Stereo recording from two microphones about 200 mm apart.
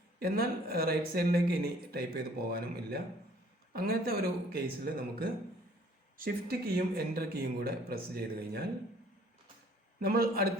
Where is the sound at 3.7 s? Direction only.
50° right (ahead or behind).